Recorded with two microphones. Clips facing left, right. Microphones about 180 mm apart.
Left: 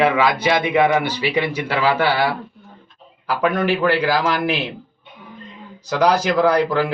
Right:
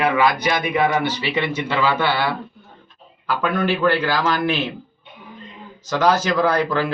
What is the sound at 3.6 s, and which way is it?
Speech, 15° left (ahead or behind).